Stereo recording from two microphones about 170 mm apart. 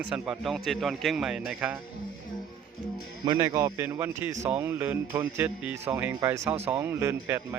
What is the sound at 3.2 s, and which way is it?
Speech, 25° right (ahead or behind).